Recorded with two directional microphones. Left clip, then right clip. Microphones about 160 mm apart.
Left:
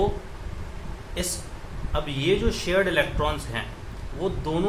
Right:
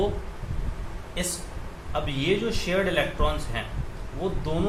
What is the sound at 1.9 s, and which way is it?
Speech, 40° left (ahead or behind).